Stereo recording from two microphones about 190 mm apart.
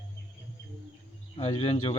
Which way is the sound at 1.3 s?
30° left (ahead or behind).